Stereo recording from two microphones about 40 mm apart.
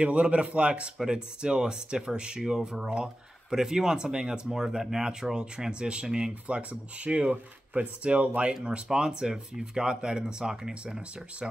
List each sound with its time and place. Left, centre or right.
0.0 s speech: right
6.4 s speech: right
8.8 s speech: centre